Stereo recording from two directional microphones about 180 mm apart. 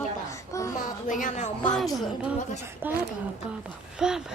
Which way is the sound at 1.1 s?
45° left (ahead or behind).